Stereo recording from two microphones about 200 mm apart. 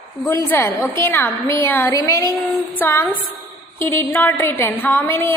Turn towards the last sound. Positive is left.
turn(degrees=10)  # may be behind; listen again after turning